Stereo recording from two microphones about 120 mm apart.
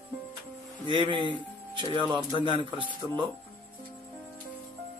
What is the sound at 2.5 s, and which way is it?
Speech, 45° right (ahead or behind).